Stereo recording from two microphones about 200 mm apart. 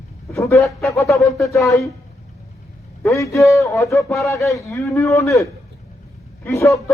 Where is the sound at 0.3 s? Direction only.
15° left (ahead or behind).